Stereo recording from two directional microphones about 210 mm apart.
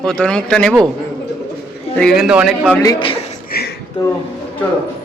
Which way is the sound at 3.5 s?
50° left (ahead or behind).